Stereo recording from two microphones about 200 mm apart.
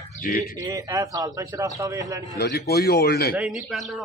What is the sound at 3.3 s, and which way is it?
Speech, 5° right (ahead or behind).